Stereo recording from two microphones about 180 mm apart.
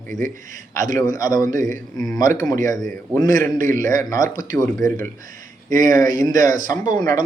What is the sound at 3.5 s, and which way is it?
Speech, 50° right (ahead or behind).